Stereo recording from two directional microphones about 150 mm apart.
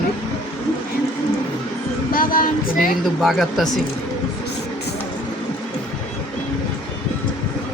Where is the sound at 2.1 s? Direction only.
70° left (ahead or behind).